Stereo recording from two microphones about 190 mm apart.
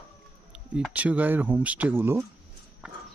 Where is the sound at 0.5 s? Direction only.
5° right (ahead or behind).